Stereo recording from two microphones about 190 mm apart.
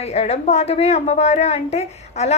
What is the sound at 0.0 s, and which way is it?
A woman's voice, 35° left (ahead or behind).